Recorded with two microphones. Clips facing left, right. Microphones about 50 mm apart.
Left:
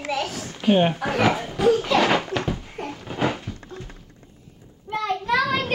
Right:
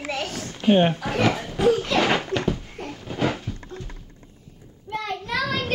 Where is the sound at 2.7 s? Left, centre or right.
Centre.